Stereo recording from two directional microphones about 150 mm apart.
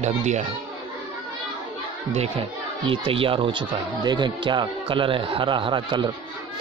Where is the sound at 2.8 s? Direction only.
35° right (ahead or behind).